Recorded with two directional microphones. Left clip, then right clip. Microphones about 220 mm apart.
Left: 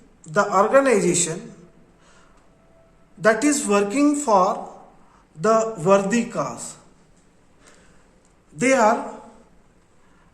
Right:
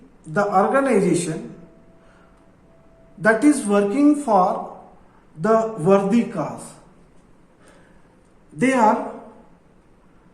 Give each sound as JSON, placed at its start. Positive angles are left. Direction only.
{"t": 0.3, "sound": "speech", "side_deg": 45}
{"t": 3.2, "sound": "speech", "side_deg": 45}
{"t": 8.5, "sound": "speech", "side_deg": 45}